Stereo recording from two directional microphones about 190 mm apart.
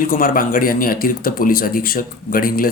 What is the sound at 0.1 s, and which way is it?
Speech, 50° left (ahead or behind).